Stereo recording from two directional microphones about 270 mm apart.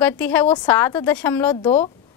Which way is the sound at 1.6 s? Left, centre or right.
Left.